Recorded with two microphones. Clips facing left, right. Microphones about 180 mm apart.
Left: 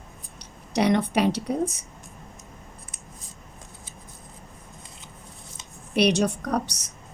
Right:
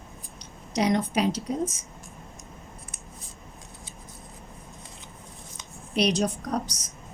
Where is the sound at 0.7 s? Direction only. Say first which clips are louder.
Left 3 dB; 65° left (ahead or behind).